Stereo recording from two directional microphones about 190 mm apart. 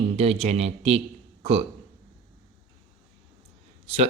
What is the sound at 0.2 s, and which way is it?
A man's voice, 30° right (ahead or behind).